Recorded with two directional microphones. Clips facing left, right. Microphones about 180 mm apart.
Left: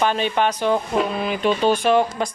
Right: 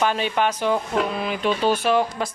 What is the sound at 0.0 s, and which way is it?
Speech, 5° right (ahead or behind).